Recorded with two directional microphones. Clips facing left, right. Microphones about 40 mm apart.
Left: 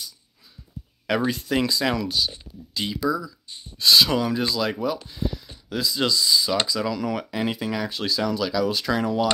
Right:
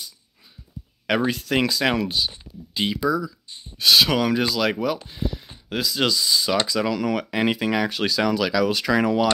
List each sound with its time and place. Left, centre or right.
1.0 s speech: right
2.1 s speech: centre
2.8 s speech: right
3.3 s speech: right
4.9 s speech: right
5.7 s speech: right
7.9 s speech: right